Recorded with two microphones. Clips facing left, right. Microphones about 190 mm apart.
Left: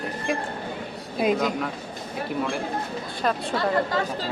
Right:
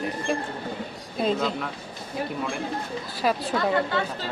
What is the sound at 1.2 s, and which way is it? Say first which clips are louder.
Speech: left 2 dB; 10° left (ahead or behind).